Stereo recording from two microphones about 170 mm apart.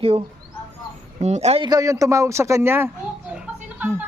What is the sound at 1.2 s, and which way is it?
Speech, 40° right (ahead or behind).